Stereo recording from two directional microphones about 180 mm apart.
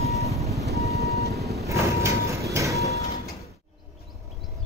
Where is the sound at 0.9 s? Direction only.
15° left (ahead or behind).